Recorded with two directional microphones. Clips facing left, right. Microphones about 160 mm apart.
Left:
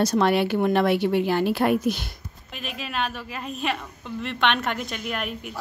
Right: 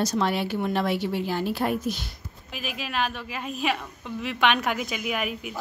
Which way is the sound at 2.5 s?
Centre (ahead or behind).